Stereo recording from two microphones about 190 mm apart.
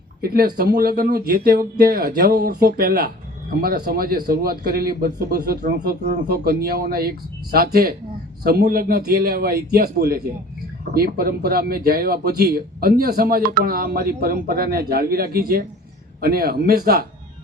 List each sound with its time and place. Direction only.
0.2 s speech: 50° right (ahead or behind)